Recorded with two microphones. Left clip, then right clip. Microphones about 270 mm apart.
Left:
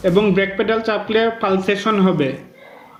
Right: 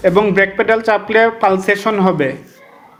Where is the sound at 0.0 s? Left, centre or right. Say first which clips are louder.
Right 4 dB; right.